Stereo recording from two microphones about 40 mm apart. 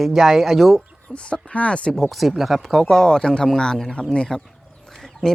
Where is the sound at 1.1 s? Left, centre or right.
Left.